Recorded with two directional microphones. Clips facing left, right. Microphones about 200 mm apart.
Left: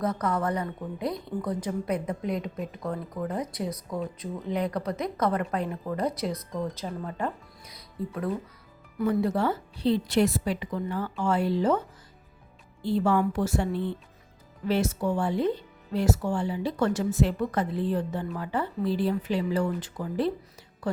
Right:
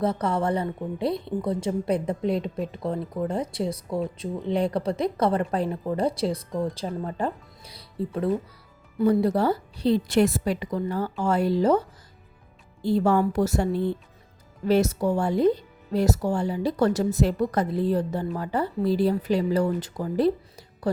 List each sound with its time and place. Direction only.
0.0 s a woman's voice: 30° right (ahead or behind)